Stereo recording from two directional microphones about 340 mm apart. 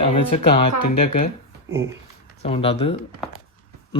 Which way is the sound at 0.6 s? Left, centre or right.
Left.